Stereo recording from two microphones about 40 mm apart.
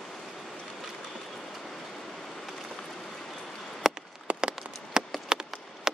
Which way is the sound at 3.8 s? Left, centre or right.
Centre.